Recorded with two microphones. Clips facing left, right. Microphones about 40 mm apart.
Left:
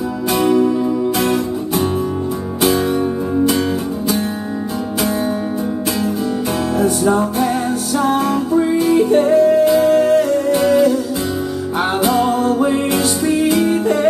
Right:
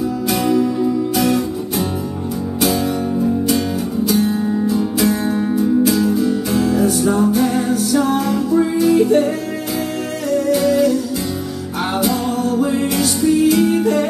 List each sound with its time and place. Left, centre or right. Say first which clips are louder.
0.4 s music: left 3 dB; left
5.6 s music: right 5 dB; left
9.8 s music: left 11 dB; left
12.0 s music: left 3 dB; left